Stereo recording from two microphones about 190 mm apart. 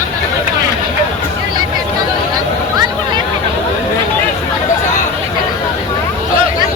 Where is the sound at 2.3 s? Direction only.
25° right (ahead or behind).